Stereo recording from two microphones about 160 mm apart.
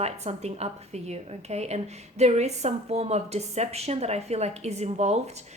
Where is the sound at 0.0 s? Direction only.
45° right (ahead or behind).